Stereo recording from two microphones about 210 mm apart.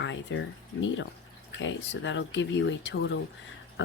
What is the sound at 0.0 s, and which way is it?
Speech, 60° left (ahead or behind).